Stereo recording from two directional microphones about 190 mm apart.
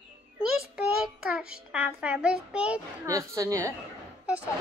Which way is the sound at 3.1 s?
15° right (ahead or behind).